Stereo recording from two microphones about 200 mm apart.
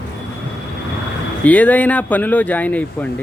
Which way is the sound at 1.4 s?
10° left (ahead or behind).